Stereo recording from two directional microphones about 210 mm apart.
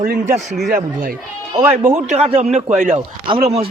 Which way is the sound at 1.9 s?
30° right (ahead or behind).